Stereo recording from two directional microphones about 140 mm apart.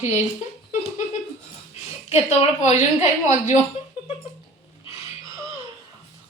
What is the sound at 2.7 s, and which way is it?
Speech, 15° right (ahead or behind).